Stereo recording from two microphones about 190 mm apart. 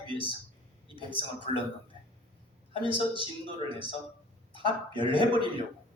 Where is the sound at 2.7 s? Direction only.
25° right (ahead or behind).